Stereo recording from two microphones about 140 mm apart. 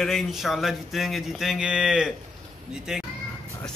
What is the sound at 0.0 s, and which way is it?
A man's voice, centre (ahead or behind).